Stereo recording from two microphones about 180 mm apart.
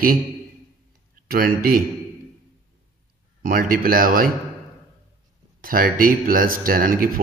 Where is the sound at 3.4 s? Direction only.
50° right (ahead or behind).